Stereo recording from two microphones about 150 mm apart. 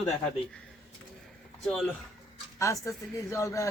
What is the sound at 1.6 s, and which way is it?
Speech, 5° left (ahead or behind).